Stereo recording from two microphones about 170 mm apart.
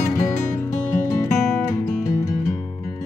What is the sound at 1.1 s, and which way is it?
Music, 15° left (ahead or behind).